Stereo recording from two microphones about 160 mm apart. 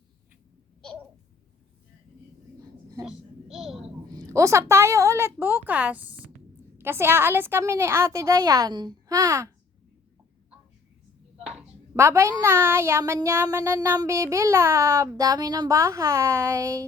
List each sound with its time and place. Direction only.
3.0 s a sound: centre (ahead or behind)
4.1 s a woman's voice: 20° right (ahead or behind)
11.9 s speech: 15° right (ahead or behind)